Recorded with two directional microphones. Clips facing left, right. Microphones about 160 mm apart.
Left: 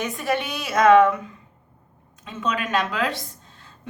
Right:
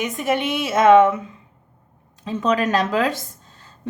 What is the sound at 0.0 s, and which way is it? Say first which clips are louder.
A woman's voice: right 3 dB; 20° right (ahead or behind).